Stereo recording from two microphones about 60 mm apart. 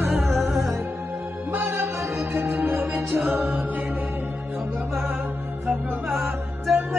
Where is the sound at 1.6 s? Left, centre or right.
Right.